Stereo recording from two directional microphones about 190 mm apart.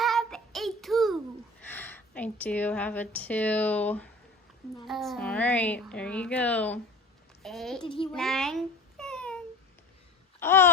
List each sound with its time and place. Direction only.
0.0 s child singing: centre (ahead or behind)
1.6 s a woman's voice: 10° left (ahead or behind)
7.8 s a child's voice: 25° left (ahead or behind)
8.1 s babbling: centre (ahead or behind)
10.4 s a woman's voice: 10° left (ahead or behind)